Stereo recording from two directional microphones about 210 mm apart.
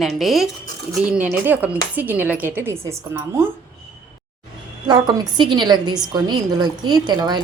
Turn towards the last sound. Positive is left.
turn(degrees=-20)  # may be behind; listen again after turning